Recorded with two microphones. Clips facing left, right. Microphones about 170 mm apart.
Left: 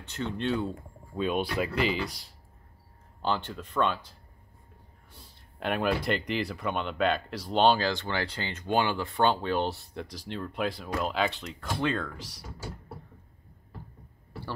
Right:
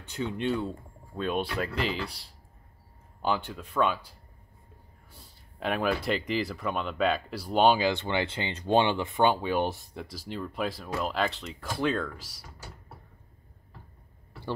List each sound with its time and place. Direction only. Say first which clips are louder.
0.0 s speech: right 1 dB; 10° right (ahead or behind)
2.0 s speech: left 3 dB; 30° right (ahead or behind)
3.2 s speech: right 1 dB; 10° right (ahead or behind)
5.1 s speech: left 1 dB; centre (ahead or behind)